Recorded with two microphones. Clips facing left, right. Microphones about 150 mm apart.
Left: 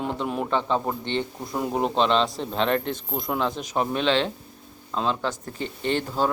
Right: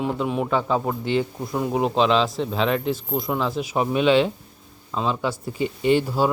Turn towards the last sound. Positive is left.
turn(degrees=-10)  # may be behind; listen again after turning